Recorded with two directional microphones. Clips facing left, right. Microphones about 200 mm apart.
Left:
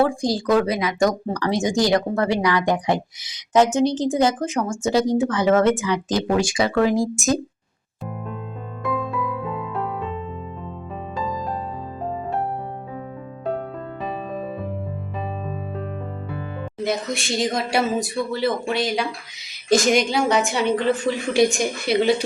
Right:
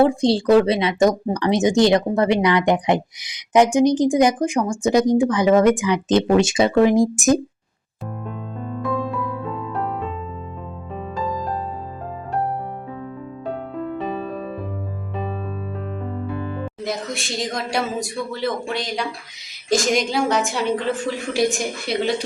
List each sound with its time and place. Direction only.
0.0 s speech: 25° right (ahead or behind)
8.8 s music: centre (ahead or behind)
13.4 s music: centre (ahead or behind)
16.8 s speech: centre (ahead or behind)